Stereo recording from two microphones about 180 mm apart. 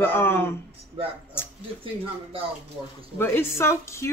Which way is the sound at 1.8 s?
30° right (ahead or behind).